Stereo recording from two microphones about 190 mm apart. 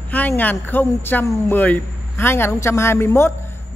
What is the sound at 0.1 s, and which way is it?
A man's voice, 10° left (ahead or behind).